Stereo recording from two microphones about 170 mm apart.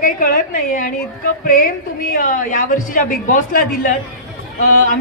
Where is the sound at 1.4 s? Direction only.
55° left (ahead or behind).